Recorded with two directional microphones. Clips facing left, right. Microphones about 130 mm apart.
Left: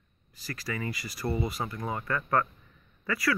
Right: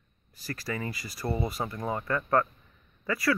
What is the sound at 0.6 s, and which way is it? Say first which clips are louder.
Speech: even; 30° right (ahead or behind).